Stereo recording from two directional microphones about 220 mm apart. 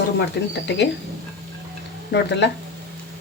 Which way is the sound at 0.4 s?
50° left (ahead or behind).